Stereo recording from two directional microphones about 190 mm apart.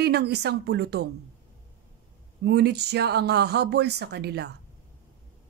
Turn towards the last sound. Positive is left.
turn(degrees=-60)  # may be behind; listen again after turning